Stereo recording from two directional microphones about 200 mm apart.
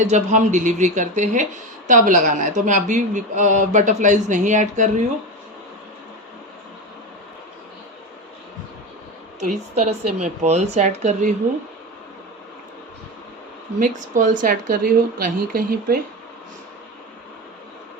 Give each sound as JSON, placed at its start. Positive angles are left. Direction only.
{"t": 0.1, "sound": "speech", "side_deg": -35}
{"t": 9.4, "sound": "speech", "side_deg": -35}
{"t": 13.7, "sound": "a woman's voice", "side_deg": -40}